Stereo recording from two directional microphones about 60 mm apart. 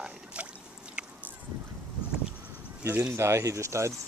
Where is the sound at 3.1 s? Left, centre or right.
Right.